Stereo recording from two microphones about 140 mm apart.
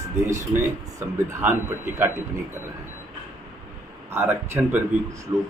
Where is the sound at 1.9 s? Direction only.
15° right (ahead or behind).